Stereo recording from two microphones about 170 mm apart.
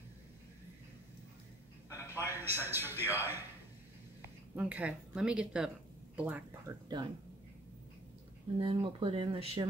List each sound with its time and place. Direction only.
2.0 s a man's voice: 15° right (ahead or behind)
4.6 s a woman's voice: 10° right (ahead or behind)
8.5 s speech: 35° right (ahead or behind)